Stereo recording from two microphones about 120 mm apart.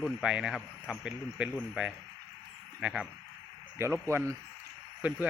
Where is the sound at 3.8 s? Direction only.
20° right (ahead or behind).